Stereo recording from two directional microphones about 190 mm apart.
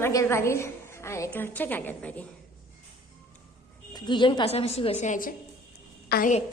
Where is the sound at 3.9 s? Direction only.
25° left (ahead or behind); by 6.3 s 45° left (ahead or behind).